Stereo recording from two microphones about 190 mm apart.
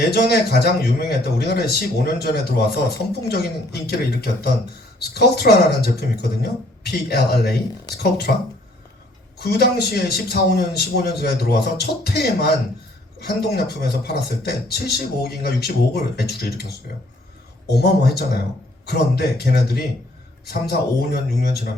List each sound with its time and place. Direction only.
0.0 s a man's voice: 55° left (ahead or behind)